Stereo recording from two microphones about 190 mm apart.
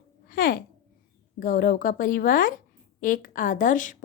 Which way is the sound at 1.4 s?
50° left (ahead or behind).